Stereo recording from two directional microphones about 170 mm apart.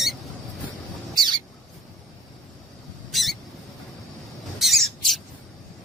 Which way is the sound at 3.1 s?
Centre (ahead or behind).